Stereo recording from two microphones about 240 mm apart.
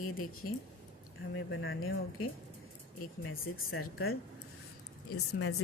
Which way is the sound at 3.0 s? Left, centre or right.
Left.